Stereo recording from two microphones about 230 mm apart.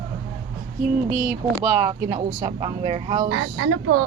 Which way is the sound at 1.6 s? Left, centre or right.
Right.